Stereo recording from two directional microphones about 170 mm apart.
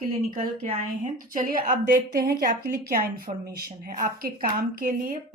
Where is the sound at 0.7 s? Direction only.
50° right (ahead or behind).